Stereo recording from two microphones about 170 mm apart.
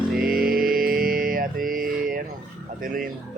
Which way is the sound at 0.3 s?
60° right (ahead or behind).